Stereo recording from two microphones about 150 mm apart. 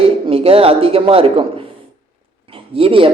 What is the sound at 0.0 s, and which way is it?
Speech, 40° right (ahead or behind).